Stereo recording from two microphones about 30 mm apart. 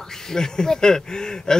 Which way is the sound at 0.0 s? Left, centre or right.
Centre.